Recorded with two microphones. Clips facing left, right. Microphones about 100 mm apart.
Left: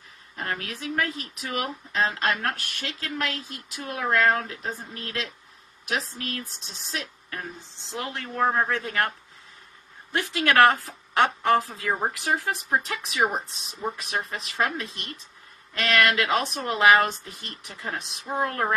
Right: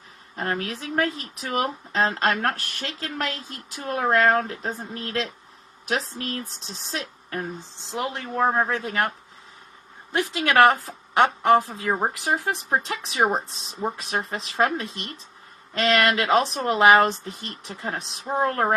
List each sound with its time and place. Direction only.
0.3 s speech: 35° right (ahead or behind)
7.9 s a woman's voice: 20° right (ahead or behind)